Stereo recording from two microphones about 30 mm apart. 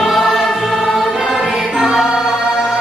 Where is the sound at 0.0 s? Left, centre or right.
Centre.